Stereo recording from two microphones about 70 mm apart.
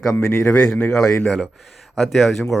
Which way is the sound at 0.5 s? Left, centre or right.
Left.